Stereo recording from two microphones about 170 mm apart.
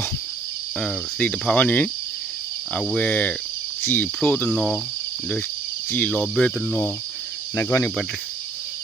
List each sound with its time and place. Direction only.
0.8 s speech: 5° left (ahead or behind)
5.9 s speech: 10° left (ahead or behind)